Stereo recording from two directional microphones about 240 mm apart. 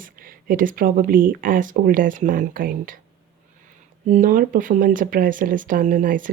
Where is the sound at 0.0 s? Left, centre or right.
Right.